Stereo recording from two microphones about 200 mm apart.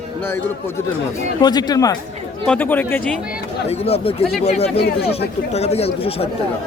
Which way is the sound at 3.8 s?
30° left (ahead or behind).